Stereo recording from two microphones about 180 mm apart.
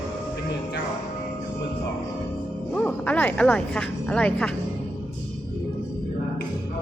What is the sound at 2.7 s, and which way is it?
Speech, 5° left (ahead or behind).